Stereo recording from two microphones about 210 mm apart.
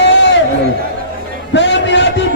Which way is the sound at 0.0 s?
60° left (ahead or behind).